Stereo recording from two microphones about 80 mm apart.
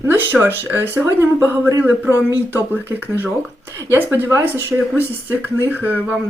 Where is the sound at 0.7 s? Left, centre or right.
Right.